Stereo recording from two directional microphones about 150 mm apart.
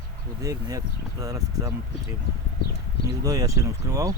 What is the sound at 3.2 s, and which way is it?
Speech, 20° right (ahead or behind).